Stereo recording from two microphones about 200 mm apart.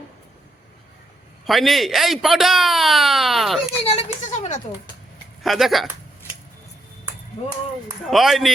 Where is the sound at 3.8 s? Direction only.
30° left (ahead or behind).